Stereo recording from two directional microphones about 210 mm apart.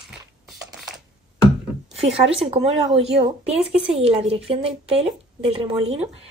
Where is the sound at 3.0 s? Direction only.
30° right (ahead or behind).